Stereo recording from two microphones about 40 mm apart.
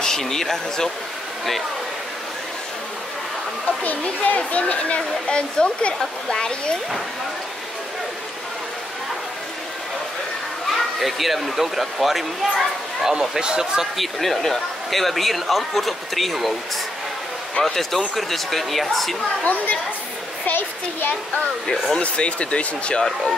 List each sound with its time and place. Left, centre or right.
0.0 s speech: centre
3.6 s speech: left; by 6.8 s centre
10.7 s speech: centre
13.4 s speech: centre
13.9 s a man's voice: centre
17.6 s a man's voice: centre
19.4 s speech: left
20.4 s a child's voice: left
22.0 s speech: left